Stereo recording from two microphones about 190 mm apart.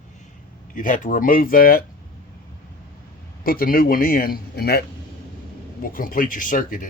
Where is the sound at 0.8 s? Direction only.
45° left (ahead or behind).